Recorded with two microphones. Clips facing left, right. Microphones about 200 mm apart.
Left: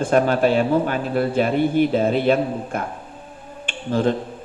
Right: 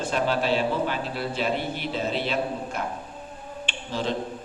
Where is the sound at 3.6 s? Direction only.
50° left (ahead or behind).